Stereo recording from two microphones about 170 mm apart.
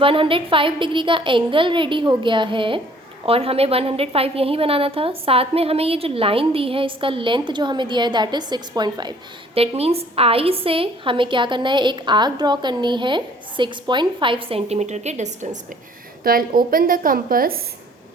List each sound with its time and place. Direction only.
0.0 s a woman's voice: 30° right (ahead or behind)
9.6 s a woman's voice: 35° right (ahead or behind)
16.2 s a woman's voice: 60° right (ahead or behind)